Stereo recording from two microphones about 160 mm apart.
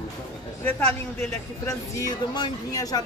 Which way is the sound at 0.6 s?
10° left (ahead or behind).